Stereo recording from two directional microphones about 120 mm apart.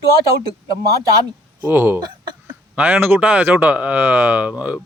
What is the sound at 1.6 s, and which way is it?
A man's voice, 20° right (ahead or behind).